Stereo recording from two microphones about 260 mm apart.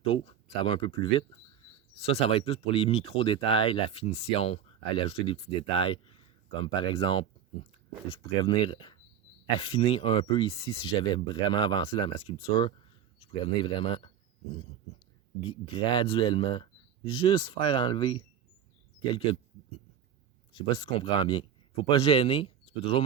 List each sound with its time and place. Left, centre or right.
0.0 s speech: left
15.4 s speech: centre
20.5 s speech: centre